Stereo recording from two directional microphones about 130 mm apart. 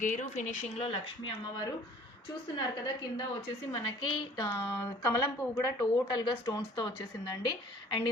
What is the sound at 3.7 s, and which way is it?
Speech, 40° left (ahead or behind).